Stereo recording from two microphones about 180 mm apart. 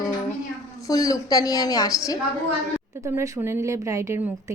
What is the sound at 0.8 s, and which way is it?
A woman's voice, 20° left (ahead or behind).